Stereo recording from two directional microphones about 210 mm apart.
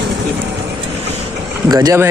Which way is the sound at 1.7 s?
15° right (ahead or behind).